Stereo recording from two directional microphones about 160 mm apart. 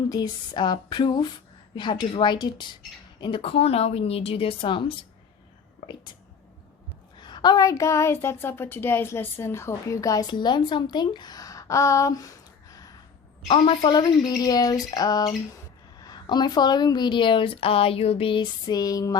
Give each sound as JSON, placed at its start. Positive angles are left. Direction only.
{"t": 0.1, "sound": "a woman's voice", "side_deg": 25}
{"t": 7.2, "sound": "speech", "side_deg": 30}
{"t": 13.5, "sound": "speech", "side_deg": 30}